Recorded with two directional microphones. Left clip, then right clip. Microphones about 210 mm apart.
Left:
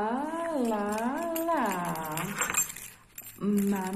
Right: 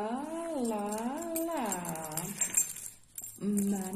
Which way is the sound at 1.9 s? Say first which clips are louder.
Left 6 dB; 25° right (ahead or behind).